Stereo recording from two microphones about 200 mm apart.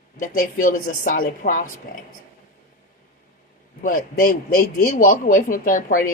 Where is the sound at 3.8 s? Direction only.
45° left (ahead or behind).